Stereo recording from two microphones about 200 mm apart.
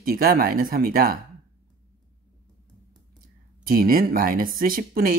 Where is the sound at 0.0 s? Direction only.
45° right (ahead or behind).